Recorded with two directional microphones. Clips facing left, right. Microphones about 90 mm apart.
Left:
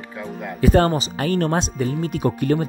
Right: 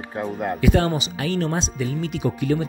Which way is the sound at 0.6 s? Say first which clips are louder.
Left 4 dB; 40° left (ahead or behind).